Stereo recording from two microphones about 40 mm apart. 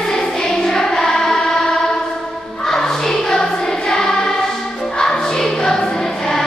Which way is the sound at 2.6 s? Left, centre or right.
Centre.